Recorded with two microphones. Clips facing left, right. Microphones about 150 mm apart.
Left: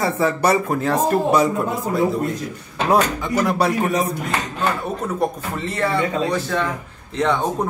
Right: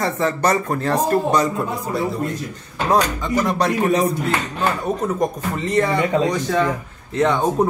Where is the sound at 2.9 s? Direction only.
5° left (ahead or behind).